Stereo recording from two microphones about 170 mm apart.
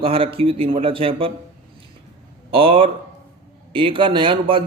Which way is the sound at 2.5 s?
30° right (ahead or behind).